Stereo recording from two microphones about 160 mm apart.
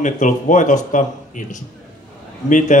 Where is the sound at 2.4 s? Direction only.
50° left (ahead or behind).